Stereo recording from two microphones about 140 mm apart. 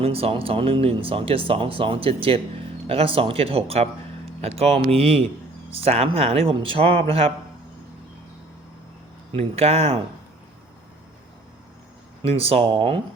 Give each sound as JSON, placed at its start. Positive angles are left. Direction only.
{"t": 0.0, "sound": "a man's voice", "side_deg": -45}
{"t": 9.3, "sound": "a man's voice", "side_deg": -45}
{"t": 12.2, "sound": "a man's voice", "side_deg": -45}